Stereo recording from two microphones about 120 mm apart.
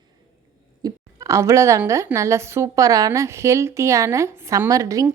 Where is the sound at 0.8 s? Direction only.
30° right (ahead or behind).